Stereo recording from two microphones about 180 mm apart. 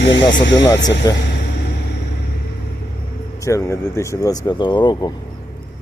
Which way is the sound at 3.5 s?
15° left (ahead or behind).